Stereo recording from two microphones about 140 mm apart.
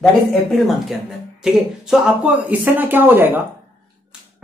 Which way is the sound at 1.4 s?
5° right (ahead or behind).